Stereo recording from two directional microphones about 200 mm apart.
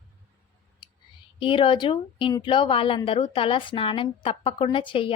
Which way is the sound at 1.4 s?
25° left (ahead or behind).